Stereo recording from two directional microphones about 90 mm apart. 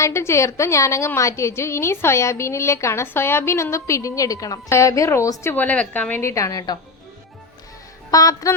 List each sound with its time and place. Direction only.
0.0 s a woman's voice: 30° left (ahead or behind)
5.5 s a woman's voice: 20° left (ahead or behind); by 6.7 s 40° left (ahead or behind)
8.1 s a woman's voice: 40° left (ahead or behind)